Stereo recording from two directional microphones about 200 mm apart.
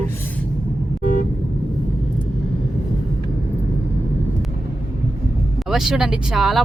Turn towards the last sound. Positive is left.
turn(degrees=0)  # may be behind; listen again after turning